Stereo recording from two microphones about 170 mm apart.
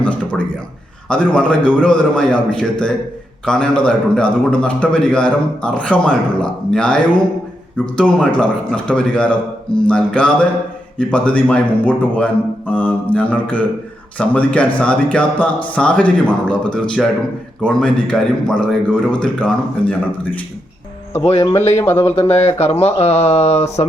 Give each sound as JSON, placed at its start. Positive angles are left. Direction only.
{"t": 0.0, "sound": "a man's voice", "side_deg": 10}
{"t": 21.2, "sound": "a man's voice", "side_deg": 25}
{"t": 21.8, "sound": "speech", "side_deg": 15}
{"t": 22.3, "sound": "speech", "side_deg": 35}